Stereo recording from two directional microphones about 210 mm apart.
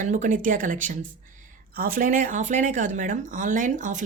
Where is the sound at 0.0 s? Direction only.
35° right (ahead or behind).